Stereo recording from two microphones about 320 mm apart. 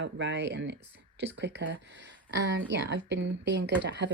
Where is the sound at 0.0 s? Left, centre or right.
Right.